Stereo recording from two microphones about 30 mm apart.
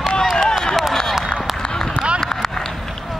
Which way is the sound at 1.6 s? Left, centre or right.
Left.